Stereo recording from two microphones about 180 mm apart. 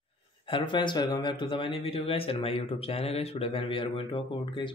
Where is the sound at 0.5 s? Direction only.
25° left (ahead or behind).